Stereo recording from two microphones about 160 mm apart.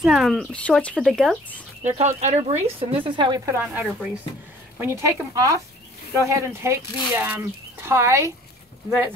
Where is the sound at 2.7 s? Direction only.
30° right (ahead or behind); by 5.2 s 15° right (ahead or behind).